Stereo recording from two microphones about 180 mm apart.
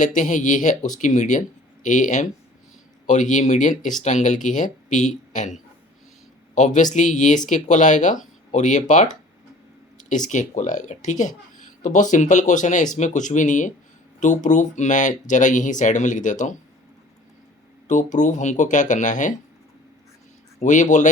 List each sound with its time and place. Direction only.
0.0 s a man's voice: 45° left (ahead or behind)
17.8 s speech: 45° left (ahead or behind)
20.6 s speech: 45° left (ahead or behind)